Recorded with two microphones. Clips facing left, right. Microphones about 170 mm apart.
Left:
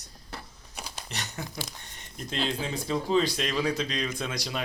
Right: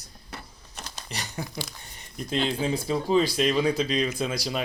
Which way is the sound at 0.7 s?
10° left (ahead or behind).